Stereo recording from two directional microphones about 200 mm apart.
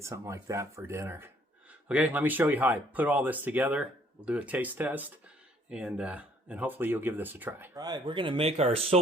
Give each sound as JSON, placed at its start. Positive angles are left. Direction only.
{"t": 0.0, "sound": "speech", "side_deg": -15}
{"t": 7.8, "sound": "speech", "side_deg": -20}